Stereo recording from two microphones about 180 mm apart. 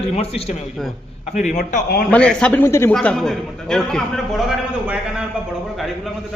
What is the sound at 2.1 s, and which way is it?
Speech, 5° left (ahead or behind).